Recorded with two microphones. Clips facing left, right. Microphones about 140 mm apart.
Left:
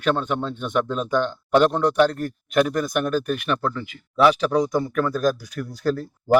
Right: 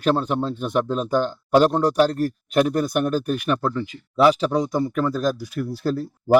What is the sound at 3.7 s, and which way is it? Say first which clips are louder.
Speech: right 3 dB; 30° right (ahead or behind).